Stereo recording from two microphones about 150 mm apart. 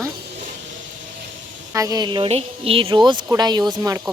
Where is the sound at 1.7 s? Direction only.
25° right (ahead or behind).